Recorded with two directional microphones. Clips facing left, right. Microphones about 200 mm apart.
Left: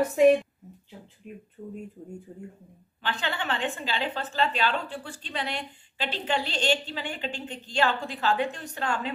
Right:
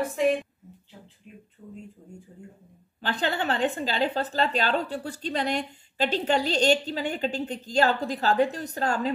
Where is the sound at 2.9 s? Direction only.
40° right (ahead or behind).